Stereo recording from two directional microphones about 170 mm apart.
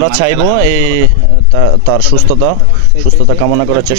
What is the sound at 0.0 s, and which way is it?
Speech, 30° right (ahead or behind).